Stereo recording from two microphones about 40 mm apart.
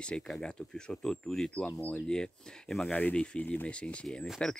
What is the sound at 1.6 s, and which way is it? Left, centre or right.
Speech, left.